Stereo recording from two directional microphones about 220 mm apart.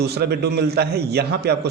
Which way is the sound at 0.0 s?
50° right (ahead or behind).